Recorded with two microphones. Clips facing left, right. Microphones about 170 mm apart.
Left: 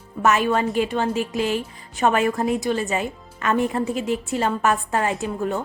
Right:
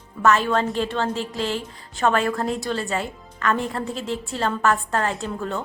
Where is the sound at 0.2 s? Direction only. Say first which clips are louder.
Even; 15° left (ahead or behind).